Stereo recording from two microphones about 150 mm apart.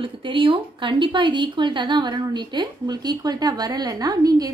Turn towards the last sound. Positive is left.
turn(degrees=-25)  # may be behind; listen again after turning